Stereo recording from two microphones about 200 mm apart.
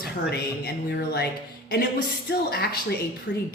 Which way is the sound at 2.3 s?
50° left (ahead or behind).